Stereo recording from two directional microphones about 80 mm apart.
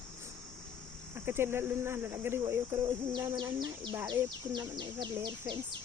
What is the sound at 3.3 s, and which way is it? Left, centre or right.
Speech, right.